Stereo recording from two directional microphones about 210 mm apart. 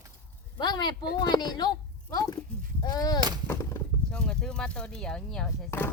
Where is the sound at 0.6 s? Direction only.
20° left (ahead or behind).